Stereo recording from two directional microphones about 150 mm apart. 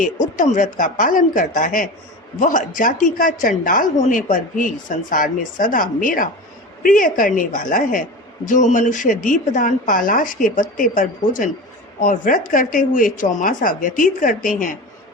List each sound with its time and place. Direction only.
0.0 s a woman's voice: 60° left (ahead or behind)